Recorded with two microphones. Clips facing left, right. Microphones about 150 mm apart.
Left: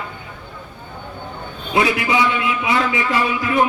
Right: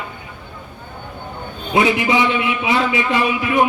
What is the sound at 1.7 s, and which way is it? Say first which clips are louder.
A man's voice: right 2 dB; 25° right (ahead or behind).